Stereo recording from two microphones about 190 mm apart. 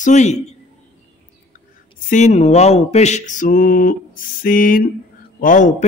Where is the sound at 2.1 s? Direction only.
40° left (ahead or behind).